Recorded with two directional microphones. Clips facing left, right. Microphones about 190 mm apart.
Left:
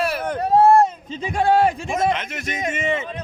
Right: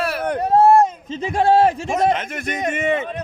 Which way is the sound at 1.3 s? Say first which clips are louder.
Right 2 dB; 35° right (ahead or behind).